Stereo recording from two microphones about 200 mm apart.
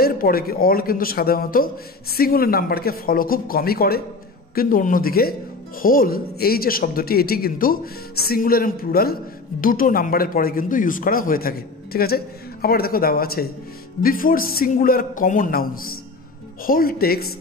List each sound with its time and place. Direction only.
0.0 s speech: 50° left (ahead or behind)